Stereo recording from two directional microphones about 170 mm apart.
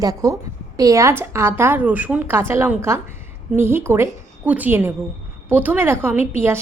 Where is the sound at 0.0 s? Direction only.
20° right (ahead or behind).